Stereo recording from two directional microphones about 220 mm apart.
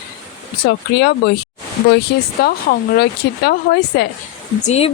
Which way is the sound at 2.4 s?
45° left (ahead or behind).